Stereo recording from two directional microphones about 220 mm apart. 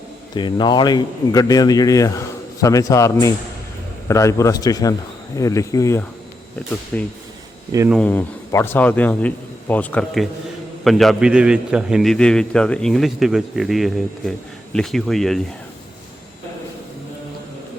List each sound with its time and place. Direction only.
0.3 s a man's voice: 20° left (ahead or behind); by 15.4 s centre (ahead or behind)